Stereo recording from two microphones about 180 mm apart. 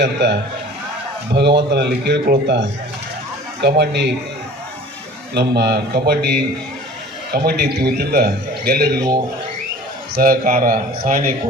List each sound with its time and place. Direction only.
0.0 s speech: 70° right (ahead or behind)
1.3 s speech: 25° right (ahead or behind)
1.7 s speech: 65° right (ahead or behind)
3.6 s a man's voice: 65° right (ahead or behind)
5.3 s a man's voice: 65° right (ahead or behind)
9.0 s speech: 20° right (ahead or behind)
10.2 s speech: 50° right (ahead or behind)